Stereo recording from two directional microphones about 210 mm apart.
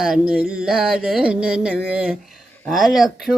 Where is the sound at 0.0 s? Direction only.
5° right (ahead or behind).